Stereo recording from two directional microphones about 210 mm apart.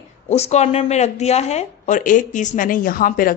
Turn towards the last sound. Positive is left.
turn(degrees=40)  # may be behind; listen again after turning